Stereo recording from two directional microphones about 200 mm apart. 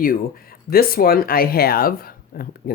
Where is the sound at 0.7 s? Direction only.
50° left (ahead or behind).